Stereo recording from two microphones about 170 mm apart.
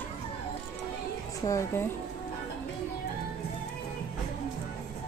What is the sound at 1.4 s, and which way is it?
Speech, 15° left (ahead or behind).